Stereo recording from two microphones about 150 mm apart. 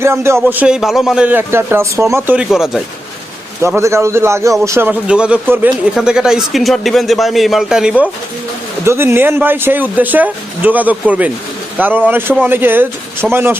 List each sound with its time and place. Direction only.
0.0 s speech: 15° right (ahead or behind)
3.6 s a man's voice: 20° right (ahead or behind)
8.8 s speech: 15° right (ahead or behind)